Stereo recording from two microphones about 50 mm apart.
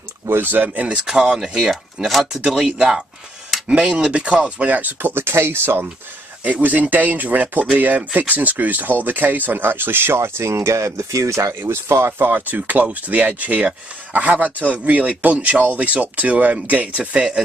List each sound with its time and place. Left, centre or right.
0.3 s speech: right
1.0 s speech: centre
3.6 s speech: right
6.4 s speech: right
10.5 s speech: right
11.6 s speech: right
12.2 s speech: right